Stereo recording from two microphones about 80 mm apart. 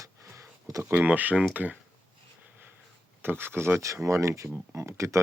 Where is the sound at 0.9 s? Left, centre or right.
Centre.